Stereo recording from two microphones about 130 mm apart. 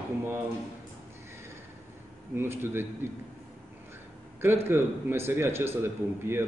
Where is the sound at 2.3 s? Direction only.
20° right (ahead or behind).